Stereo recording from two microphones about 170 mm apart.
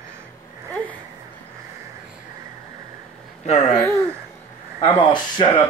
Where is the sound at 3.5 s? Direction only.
40° left (ahead or behind).